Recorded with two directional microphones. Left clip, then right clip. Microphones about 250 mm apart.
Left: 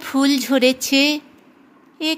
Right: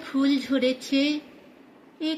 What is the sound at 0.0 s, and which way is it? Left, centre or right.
Speech, left.